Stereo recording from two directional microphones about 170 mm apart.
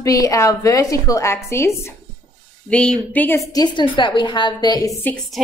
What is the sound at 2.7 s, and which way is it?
A woman's voice, 5° left (ahead or behind).